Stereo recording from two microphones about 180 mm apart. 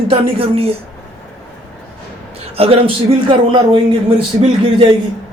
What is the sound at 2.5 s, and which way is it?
Speech, 30° right (ahead or behind).